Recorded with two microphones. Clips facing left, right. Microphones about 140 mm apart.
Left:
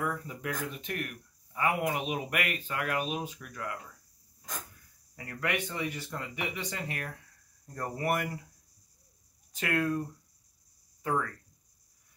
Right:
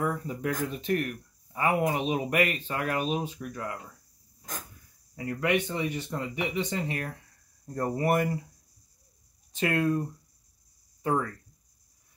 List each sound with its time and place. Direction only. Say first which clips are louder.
0.0 s speech: right 5 dB; 35° right (ahead or behind)
5.1 s speech: right 7 dB; 20° right (ahead or behind)
9.5 s speech: right 4 dB; 25° right (ahead or behind)
11.0 s a sound: right 3 dB; 25° right (ahead or behind)